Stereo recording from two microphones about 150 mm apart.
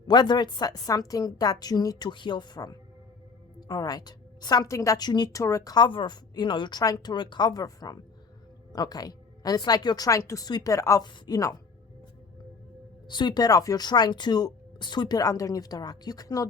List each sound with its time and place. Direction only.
0.1 s a woman's voice: 30° left (ahead or behind)
13.1 s a woman's voice: 30° left (ahead or behind)